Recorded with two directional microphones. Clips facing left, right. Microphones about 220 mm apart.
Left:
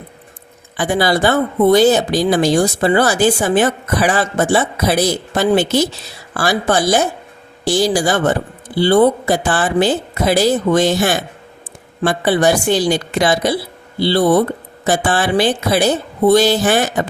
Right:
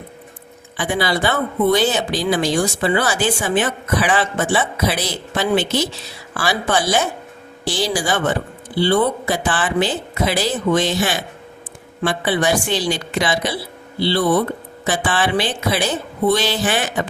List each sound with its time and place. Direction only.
0.8 s a woman's voice: 45° left (ahead or behind)